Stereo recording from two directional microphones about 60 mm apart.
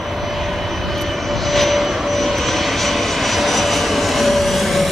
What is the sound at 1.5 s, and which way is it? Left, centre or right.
Vehicle, centre.